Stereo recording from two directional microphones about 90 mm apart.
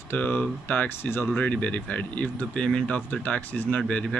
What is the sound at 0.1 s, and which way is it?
Speech, 20° left (ahead or behind).